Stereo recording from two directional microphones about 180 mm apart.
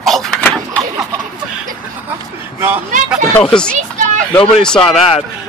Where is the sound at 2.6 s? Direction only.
10° right (ahead or behind).